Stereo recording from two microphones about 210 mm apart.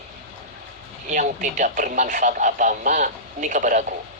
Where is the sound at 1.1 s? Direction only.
35° right (ahead or behind).